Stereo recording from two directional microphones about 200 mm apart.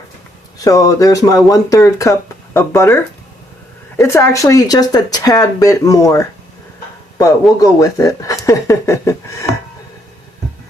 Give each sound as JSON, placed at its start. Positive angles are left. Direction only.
{"t": 0.6, "sound": "speech", "side_deg": 15}
{"t": 7.6, "sound": "speech", "side_deg": 15}